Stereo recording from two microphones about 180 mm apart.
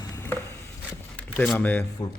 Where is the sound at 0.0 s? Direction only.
15° left (ahead or behind).